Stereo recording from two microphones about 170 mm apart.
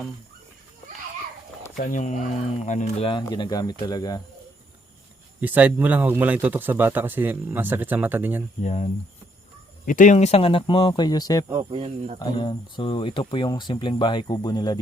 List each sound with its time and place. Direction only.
1.7 s speech: 50° left (ahead or behind)
3.1 s speech: 25° left (ahead or behind)
5.4 s a man's voice: 10° right (ahead or behind)
8.6 s speech: 45° left (ahead or behind); by 11.4 s 20° left (ahead or behind)
11.7 s speech: 35° right (ahead or behind)
12.2 s speech: 30° left (ahead or behind)